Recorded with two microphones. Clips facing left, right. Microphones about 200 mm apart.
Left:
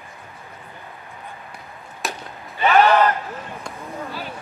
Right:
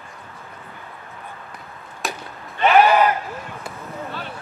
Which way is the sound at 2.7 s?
10° right (ahead or behind).